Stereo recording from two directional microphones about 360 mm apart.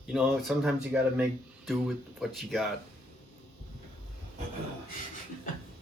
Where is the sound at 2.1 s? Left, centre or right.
Centre.